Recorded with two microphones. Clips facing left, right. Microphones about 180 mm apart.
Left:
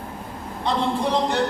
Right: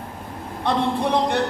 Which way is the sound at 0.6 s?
60° right (ahead or behind).